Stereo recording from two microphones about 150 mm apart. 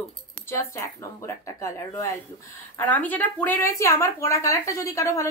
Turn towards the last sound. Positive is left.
turn(degrees=20)  # may be behind; listen again after turning